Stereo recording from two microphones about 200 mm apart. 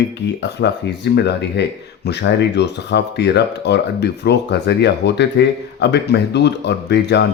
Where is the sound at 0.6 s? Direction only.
60° left (ahead or behind).